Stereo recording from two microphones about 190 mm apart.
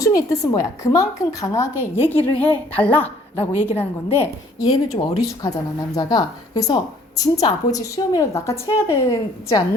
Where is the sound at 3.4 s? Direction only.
30° left (ahead or behind).